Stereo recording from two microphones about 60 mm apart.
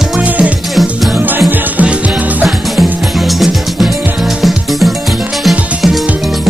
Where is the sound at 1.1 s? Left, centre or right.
Right.